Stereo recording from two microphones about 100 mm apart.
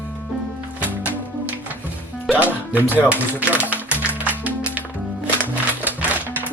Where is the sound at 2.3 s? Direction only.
15° right (ahead or behind).